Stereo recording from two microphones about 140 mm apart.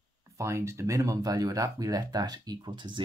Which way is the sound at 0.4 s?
20° right (ahead or behind).